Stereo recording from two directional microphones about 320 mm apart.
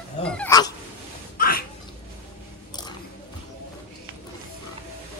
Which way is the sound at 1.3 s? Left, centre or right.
Left.